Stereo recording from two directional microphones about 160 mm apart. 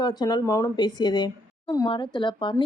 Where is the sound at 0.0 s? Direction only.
25° left (ahead or behind).